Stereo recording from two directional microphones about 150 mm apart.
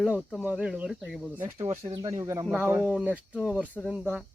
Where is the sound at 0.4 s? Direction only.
5° right (ahead or behind).